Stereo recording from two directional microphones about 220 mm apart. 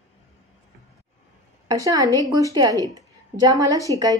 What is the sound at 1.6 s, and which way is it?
A woman's voice, 15° right (ahead or behind).